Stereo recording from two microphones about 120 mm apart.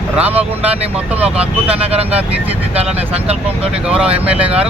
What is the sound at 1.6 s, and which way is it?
Speech, 55° right (ahead or behind).